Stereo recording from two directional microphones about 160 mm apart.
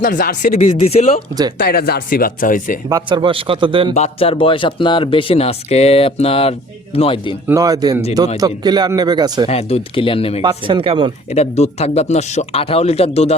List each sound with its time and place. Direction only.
0.0 s speech: 55° left (ahead or behind); by 1.0 s 40° left (ahead or behind)
1.5 s speech: 75° left (ahead or behind); by 2.7 s 60° left (ahead or behind)
2.9 s a man's voice: 30° right (ahead or behind)
3.9 s speech: 40° left (ahead or behind)
7.4 s speech: 20° right (ahead or behind)
9.5 s speech: 40° left (ahead or behind)
10.4 s a man's voice: 35° right (ahead or behind)
11.3 s speech: 45° left (ahead or behind)